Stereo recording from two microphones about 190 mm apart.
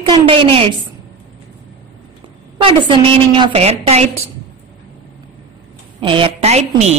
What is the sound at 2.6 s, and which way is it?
A woman's voice, 25° right (ahead or behind).